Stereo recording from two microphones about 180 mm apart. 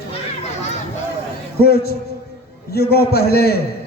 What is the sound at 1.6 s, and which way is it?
A man's voice, 60° left (ahead or behind).